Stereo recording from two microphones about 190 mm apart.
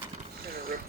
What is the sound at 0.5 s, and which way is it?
Boat, 50° right (ahead or behind).